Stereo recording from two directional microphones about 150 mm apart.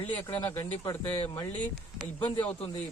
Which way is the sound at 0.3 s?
40° left (ahead or behind).